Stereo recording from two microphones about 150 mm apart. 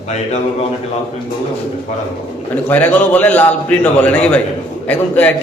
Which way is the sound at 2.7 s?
10° left (ahead or behind).